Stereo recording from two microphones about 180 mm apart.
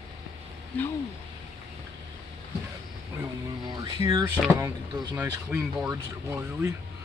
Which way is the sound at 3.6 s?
20° right (ahead or behind).